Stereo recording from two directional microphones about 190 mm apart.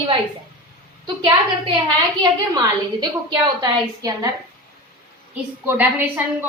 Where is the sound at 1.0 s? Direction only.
25° right (ahead or behind).